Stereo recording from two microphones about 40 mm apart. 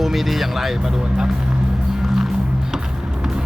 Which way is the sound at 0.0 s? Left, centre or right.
Centre.